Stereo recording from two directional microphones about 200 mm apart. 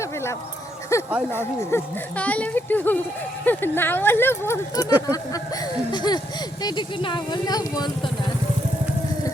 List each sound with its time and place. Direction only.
0.0 s dog: 15° left (ahead or behind)
0.9 s speech: 15° left (ahead or behind)
4.9 s a sound: 10° right (ahead or behind)
5.9 s speech: 20° left (ahead or behind)